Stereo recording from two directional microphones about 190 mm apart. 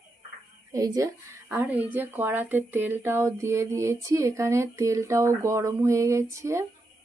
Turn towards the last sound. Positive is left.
turn(degrees=-15)  # may be behind; listen again after turning